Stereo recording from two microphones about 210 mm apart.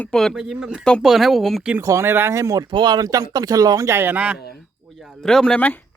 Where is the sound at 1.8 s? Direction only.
15° right (ahead or behind).